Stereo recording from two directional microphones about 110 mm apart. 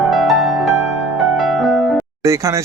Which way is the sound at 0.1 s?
Centre (ahead or behind).